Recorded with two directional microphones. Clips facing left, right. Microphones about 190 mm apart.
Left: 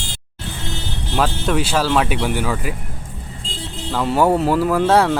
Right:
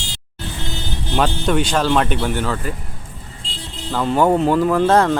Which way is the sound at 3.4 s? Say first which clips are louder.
Left 4 dB; 45° left (ahead or behind).